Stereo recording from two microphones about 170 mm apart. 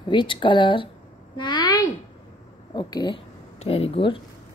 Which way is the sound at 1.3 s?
25° left (ahead or behind).